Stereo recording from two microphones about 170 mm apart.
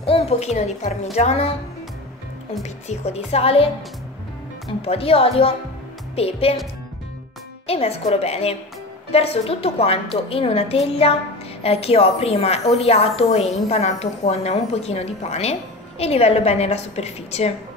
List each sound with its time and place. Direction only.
0.0 s a woman's voice: 35° left (ahead or behind)
2.6 s a woman's voice: 40° left (ahead or behind)
4.8 s a woman's voice: 35° left (ahead or behind)
7.6 s a woman's voice: 35° left (ahead or behind)